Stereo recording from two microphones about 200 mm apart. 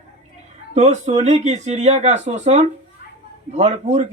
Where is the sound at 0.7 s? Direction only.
35° right (ahead or behind).